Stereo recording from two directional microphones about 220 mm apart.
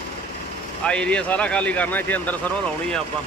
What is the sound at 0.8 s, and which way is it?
Speech, 5° left (ahead or behind).